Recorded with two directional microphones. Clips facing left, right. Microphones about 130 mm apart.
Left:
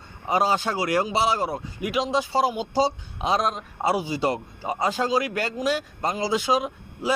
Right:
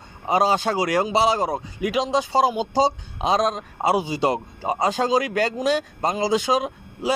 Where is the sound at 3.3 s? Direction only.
90° right.